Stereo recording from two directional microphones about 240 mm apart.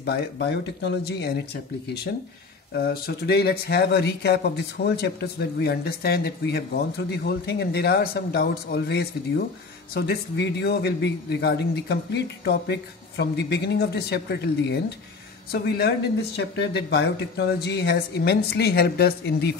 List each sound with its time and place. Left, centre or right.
0.0 s speech: left
2.7 s speech: left